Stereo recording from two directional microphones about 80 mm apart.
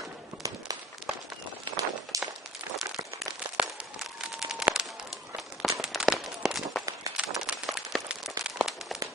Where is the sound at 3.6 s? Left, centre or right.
Centre.